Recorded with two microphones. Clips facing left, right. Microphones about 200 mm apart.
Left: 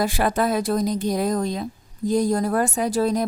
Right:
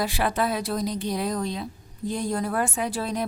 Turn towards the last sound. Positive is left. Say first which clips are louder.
# left 6 dB
turn(degrees=40)  # may be behind; listen again after turning